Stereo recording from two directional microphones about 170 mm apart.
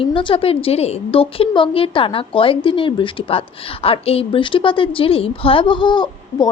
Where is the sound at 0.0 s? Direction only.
30° left (ahead or behind).